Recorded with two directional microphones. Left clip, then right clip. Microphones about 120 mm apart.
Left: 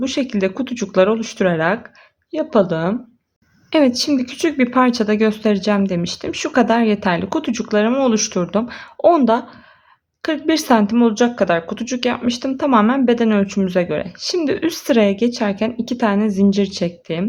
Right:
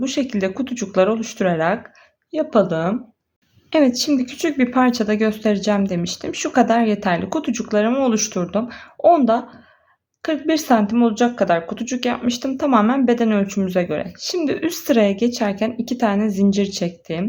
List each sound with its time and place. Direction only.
0.0 s a woman's voice: 30° left (ahead or behind)